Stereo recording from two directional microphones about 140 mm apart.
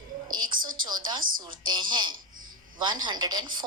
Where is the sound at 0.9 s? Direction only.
30° right (ahead or behind).